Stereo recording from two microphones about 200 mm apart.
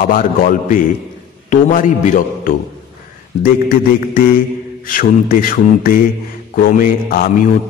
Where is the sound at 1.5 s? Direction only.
40° left (ahead or behind).